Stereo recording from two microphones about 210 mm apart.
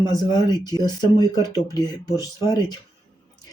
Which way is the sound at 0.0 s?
20° left (ahead or behind).